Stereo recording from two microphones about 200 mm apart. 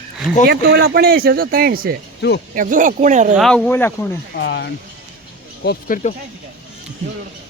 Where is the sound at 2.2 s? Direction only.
55° left (ahead or behind).